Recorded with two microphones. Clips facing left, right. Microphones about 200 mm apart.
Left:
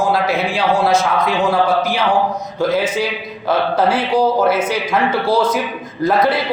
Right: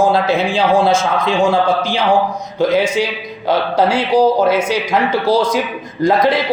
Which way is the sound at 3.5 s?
15° right (ahead or behind).